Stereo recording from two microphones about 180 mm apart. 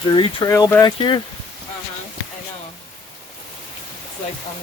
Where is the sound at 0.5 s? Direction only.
15° left (ahead or behind).